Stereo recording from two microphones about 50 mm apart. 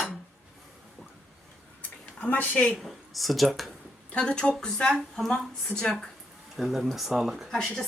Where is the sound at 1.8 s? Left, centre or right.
Left.